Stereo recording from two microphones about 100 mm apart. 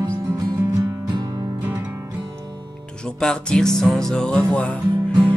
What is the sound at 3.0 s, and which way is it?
Music, 5° left (ahead or behind).